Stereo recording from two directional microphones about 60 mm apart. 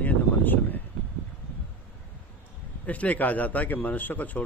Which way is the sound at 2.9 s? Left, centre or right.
Left.